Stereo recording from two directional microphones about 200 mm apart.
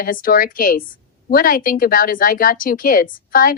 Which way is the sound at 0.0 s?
45° left (ahead or behind).